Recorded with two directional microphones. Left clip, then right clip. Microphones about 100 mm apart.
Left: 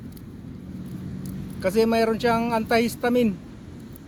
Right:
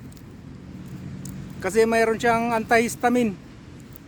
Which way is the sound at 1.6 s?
50° right (ahead or behind).